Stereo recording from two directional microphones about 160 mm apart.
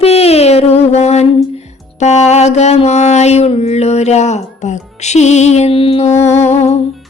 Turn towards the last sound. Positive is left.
turn(degrees=40)  # may be behind; listen again after turning